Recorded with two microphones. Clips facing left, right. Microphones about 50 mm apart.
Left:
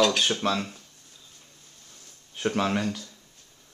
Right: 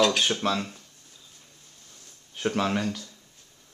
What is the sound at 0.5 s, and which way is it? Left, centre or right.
Speech, centre.